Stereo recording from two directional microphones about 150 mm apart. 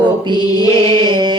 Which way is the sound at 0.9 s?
30° right (ahead or behind).